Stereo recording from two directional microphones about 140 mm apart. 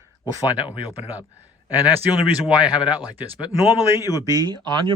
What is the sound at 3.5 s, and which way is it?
Speech, 25° left (ahead or behind).